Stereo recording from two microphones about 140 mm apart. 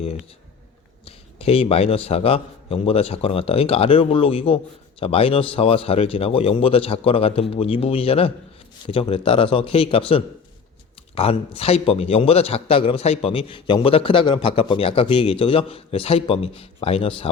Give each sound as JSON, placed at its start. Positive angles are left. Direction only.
{"t": 1.0, "sound": "a man's voice", "side_deg": 45}